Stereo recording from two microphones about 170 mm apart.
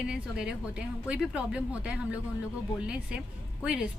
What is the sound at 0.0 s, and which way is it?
A woman's voice, 5° right (ahead or behind).